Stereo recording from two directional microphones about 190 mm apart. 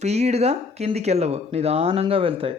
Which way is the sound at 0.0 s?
35° right (ahead or behind).